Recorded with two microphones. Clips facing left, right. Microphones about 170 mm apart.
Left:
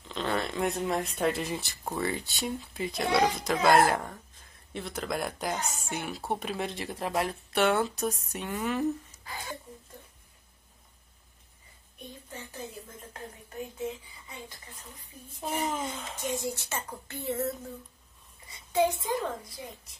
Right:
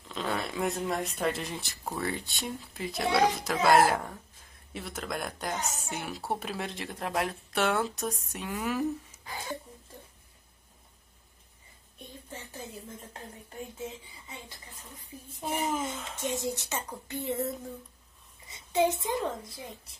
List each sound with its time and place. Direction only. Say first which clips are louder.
0.1 s a woman's voice: left 2 dB; centre (ahead or behind)
15.6 s a woman's voice: right 2 dB; 5° right (ahead or behind)
16.2 s speech: right 1 dB; 25° right (ahead or behind)
18.5 s a sound: even; 20° right (ahead or behind)
19.0 s speech: even; 25° right (ahead or behind)